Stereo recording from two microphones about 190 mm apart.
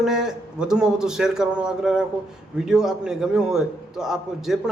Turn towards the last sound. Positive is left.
turn(degrees=0)  # may be behind; listen again after turning